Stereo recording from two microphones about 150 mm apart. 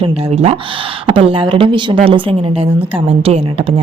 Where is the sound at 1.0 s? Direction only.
35° right (ahead or behind).